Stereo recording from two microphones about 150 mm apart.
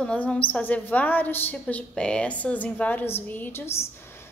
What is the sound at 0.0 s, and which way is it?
A woman's voice, 5° left (ahead or behind).